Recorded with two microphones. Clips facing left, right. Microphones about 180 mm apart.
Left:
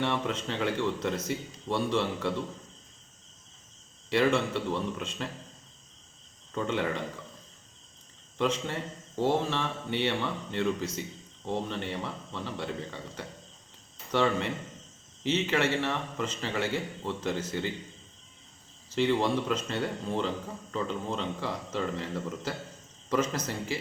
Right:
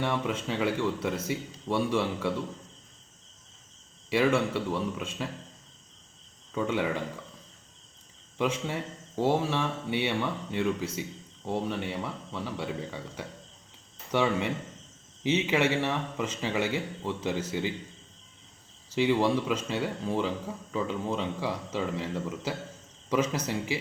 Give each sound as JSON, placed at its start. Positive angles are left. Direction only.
{"t": 0.0, "sound": "speech", "side_deg": -10}
{"t": 4.1, "sound": "speech", "side_deg": -10}
{"t": 6.5, "sound": "speech", "side_deg": -10}
{"t": 8.4, "sound": "speech", "side_deg": -10}
{"t": 18.9, "sound": "speech", "side_deg": -10}